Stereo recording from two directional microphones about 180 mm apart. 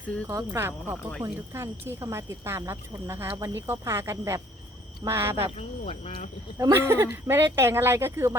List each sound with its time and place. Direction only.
0.3 s speech: 15° right (ahead or behind)
5.5 s speech: 35° left (ahead or behind)
6.6 s speech: 15° right (ahead or behind)